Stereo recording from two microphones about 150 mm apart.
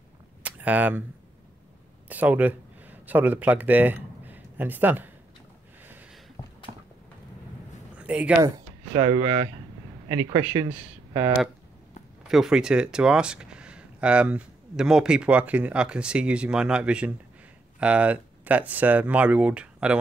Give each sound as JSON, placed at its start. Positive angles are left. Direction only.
{"t": 0.5, "sound": "speech", "side_deg": -10}
{"t": 2.0, "sound": "speech", "side_deg": -10}
{"t": 8.0, "sound": "speech", "side_deg": -10}
{"t": 8.9, "sound": "speech", "side_deg": -35}
{"t": 12.2, "sound": "speech", "side_deg": -5}